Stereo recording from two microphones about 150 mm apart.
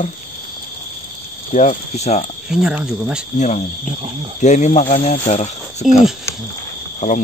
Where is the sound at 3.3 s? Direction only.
50° left (ahead or behind).